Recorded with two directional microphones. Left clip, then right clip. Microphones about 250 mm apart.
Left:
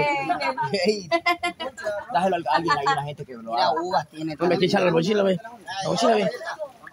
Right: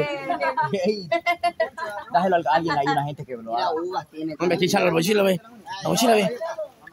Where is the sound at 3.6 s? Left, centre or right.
Left.